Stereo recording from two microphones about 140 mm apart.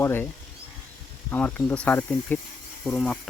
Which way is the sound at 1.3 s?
15° left (ahead or behind).